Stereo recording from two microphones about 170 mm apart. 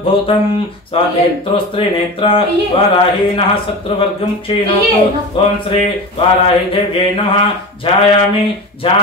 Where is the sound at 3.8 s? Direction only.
30° left (ahead or behind).